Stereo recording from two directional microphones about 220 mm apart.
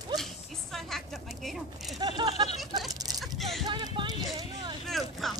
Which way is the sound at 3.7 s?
20° right (ahead or behind).